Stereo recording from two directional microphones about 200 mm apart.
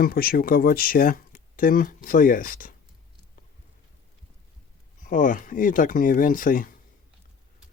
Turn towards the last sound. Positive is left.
turn(degrees=45)  # may be behind; listen again after turning